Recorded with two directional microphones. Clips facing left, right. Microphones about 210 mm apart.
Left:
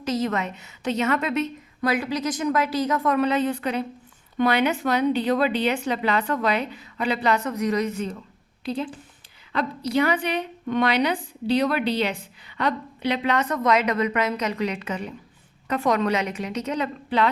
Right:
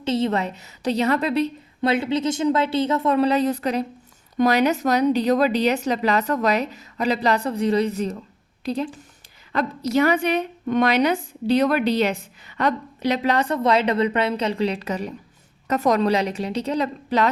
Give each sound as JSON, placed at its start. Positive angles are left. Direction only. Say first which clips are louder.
{"t": 0.0, "sound": "a woman's voice", "louder": "right 3 dB", "side_deg": -30}